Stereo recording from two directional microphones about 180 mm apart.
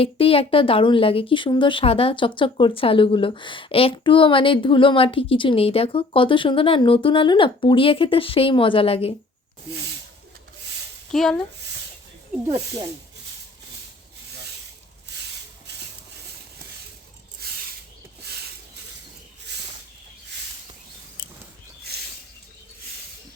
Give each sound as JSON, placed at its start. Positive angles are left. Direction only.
{"t": 0.0, "sound": "speech", "side_deg": 30}
{"t": 11.1, "sound": "speech", "side_deg": 0}
{"t": 12.5, "sound": "speech", "side_deg": -20}